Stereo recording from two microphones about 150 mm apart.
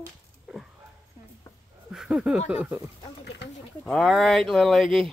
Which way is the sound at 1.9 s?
5° right (ahead or behind).